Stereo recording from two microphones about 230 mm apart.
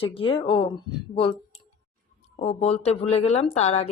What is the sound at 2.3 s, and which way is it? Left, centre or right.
Speech, left.